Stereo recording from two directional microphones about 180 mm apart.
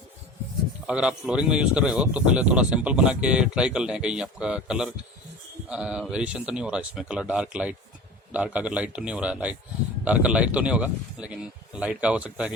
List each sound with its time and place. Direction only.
0.9 s speech: 5° right (ahead or behind)